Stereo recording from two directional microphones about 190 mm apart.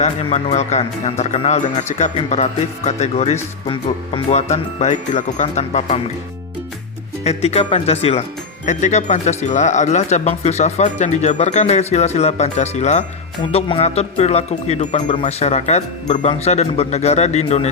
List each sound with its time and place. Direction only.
0.0 s speech: 35° left (ahead or behind)
7.3 s speech: 35° left (ahead or behind)